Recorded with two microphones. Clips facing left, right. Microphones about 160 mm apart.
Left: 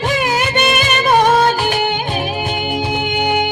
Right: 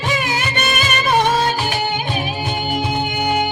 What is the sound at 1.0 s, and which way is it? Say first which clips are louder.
Music: left 4 dB; 50° left (ahead or behind).